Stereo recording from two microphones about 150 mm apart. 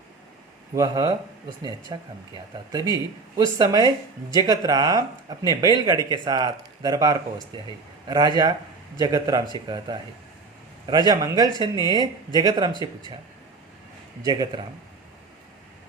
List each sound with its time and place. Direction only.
0.8 s speech: 25° right (ahead or behind)
14.2 s speech: 25° right (ahead or behind)